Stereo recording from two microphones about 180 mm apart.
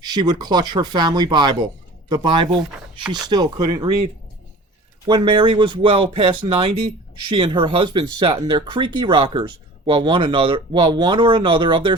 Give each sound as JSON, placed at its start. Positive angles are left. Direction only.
{"t": 0.0, "sound": "speech", "side_deg": -25}
{"t": 5.0, "sound": "speech", "side_deg": -25}